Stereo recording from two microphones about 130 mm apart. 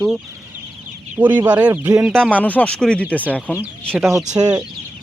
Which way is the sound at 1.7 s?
20° right (ahead or behind).